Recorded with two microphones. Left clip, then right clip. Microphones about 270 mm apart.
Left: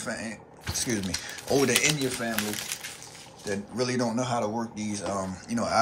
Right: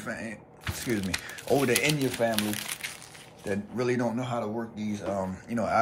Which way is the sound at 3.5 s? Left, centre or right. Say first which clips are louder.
Right 1 dB; centre.